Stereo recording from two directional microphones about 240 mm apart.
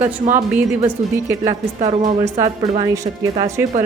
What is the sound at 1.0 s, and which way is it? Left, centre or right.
A woman's voice, right.